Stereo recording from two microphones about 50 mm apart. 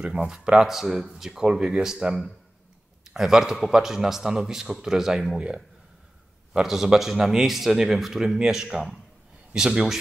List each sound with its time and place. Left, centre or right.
0.3 s a man's voice: centre
6.5 s a man's voice: centre